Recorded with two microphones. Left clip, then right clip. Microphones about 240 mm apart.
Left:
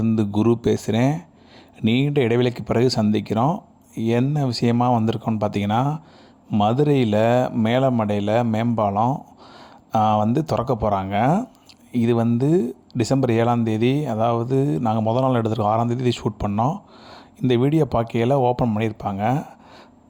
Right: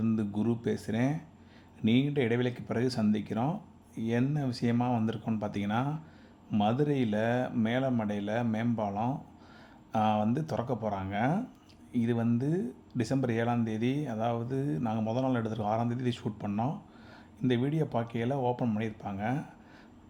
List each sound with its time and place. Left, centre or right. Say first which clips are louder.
0.0 s speech: left 11 dB; left